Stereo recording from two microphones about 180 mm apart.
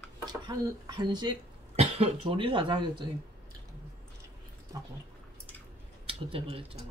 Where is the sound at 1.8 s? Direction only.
35° right (ahead or behind).